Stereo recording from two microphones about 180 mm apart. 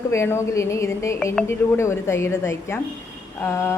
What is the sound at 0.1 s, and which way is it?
A woman's voice, 15° left (ahead or behind).